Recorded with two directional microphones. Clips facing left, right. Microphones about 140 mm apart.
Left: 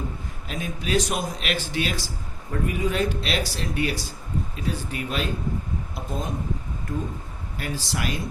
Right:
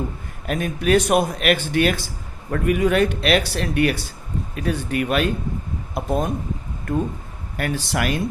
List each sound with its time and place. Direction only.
0.4 s speech: 60° right (ahead or behind)
2.5 s speech: 70° right (ahead or behind)